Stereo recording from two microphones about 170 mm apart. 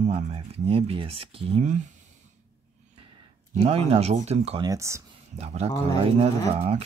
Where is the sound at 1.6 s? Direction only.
45° right (ahead or behind).